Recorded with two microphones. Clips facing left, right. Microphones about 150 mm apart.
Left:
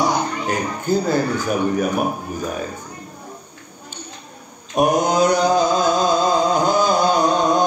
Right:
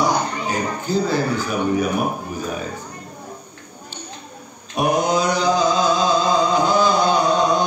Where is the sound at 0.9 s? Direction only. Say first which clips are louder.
Left 2 dB; 50° left (ahead or behind).